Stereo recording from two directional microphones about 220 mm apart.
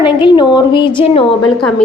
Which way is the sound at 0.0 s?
20° left (ahead or behind).